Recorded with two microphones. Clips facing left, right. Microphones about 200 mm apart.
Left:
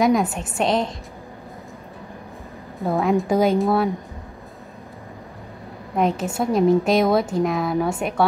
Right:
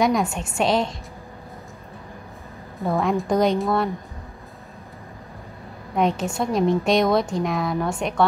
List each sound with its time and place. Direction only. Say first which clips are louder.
0.0 s a woman's voice: left 2 dB; centre (ahead or behind)
2.8 s a woman's voice: left 2 dB; centre (ahead or behind)
5.9 s a woman's voice: left 1 dB; centre (ahead or behind)